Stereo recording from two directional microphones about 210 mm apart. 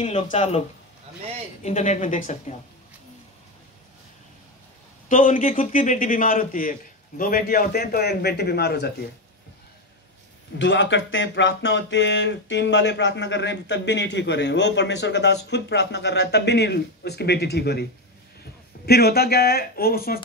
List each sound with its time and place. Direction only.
0.0 s a man's voice: 35° left (ahead or behind)
5.0 s a man's voice: 40° left (ahead or behind)
10.6 s speech: 60° left (ahead or behind)
18.9 s speech: 50° left (ahead or behind)